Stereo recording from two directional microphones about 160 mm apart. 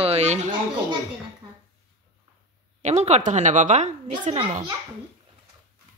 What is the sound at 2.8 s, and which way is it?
A woman's voice, 45° right (ahead or behind).